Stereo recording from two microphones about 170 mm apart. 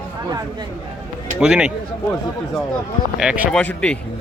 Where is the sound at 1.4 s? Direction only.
5° right (ahead or behind).